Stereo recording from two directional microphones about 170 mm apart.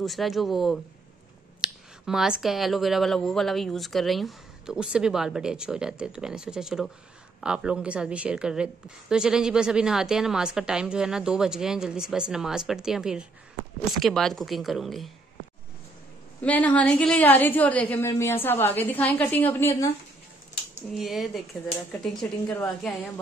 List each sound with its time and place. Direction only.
0.0 s a woman's voice: centre (ahead or behind)
16.3 s a woman's voice: 10° left (ahead or behind)
20.9 s a woman's voice: centre (ahead or behind)